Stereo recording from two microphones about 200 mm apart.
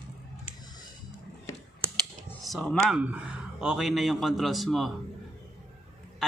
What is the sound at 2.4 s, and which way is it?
A man's voice, centre (ahead or behind).